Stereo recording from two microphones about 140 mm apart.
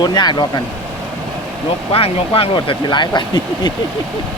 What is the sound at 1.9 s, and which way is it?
Speech, 40° left (ahead or behind).